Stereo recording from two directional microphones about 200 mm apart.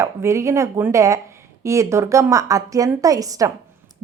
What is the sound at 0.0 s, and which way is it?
A woman's voice, 15° right (ahead or behind).